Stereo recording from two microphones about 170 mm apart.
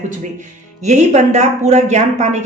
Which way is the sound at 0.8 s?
40° right (ahead or behind).